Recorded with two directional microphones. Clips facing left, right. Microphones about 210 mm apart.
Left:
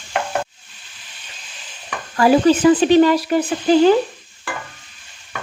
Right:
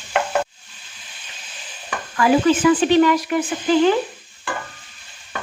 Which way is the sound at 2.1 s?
35° left (ahead or behind).